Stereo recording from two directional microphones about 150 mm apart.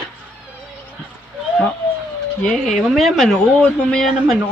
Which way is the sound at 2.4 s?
5° left (ahead or behind).